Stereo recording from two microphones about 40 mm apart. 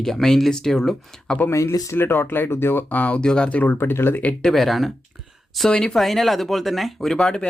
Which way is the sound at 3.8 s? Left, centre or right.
Left.